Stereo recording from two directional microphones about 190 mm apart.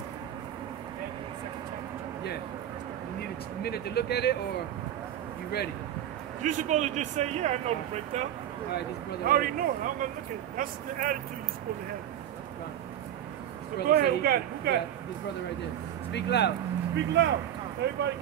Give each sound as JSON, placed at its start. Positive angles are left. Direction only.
{"t": 3.6, "sound": "speech", "side_deg": 55}
{"t": 6.4, "sound": "speech", "side_deg": -40}
{"t": 9.2, "sound": "speech", "side_deg": -50}
{"t": 13.8, "sound": "speech", "side_deg": -55}
{"t": 16.1, "sound": "speech", "side_deg": 65}
{"t": 16.9, "sound": "speech", "side_deg": -65}